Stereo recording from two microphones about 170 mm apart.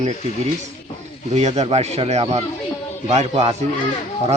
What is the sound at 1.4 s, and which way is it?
Speech, 40° right (ahead or behind).